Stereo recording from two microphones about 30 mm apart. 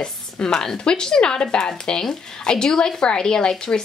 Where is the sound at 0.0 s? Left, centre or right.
Left.